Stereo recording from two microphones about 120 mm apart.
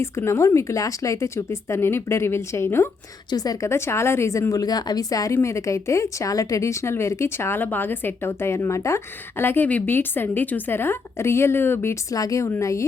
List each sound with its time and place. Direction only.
0.0 s speech: 25° left (ahead or behind)
3.2 s speech: 30° left (ahead or behind)